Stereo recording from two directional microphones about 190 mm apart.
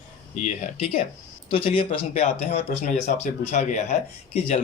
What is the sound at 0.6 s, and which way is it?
Speech, 30° left (ahead or behind).